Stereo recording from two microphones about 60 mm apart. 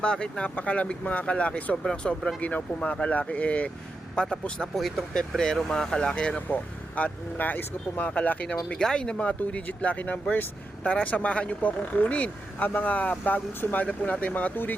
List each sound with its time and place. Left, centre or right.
0.0 s speech: centre
2.4 s speech: left
4.8 s speech: centre; by 8.5 s left
8.7 s speech: centre; by 14.8 s left